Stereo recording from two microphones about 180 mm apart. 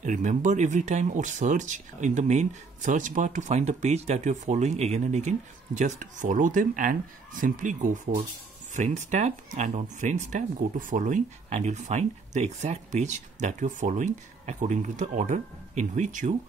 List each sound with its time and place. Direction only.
0.0 s speech: 45° right (ahead or behind)